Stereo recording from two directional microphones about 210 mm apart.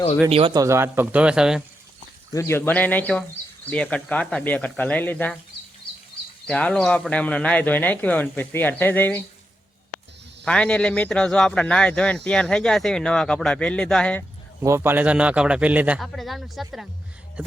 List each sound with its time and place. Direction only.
0.3 s speech: 25° right (ahead or behind); by 1.6 s 5° right (ahead or behind)
2.3 s speech: 10° left (ahead or behind)
5.8 s a sound: 25° left (ahead or behind)
6.5 s speech: 5° left (ahead or behind)
10.4 s a man's voice: 5° left (ahead or behind)
14.6 s a man's voice: 10° right (ahead or behind)